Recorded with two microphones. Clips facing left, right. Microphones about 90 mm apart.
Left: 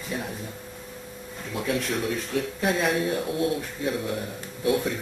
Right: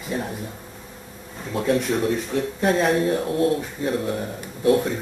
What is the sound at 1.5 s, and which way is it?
Speech, 35° right (ahead or behind).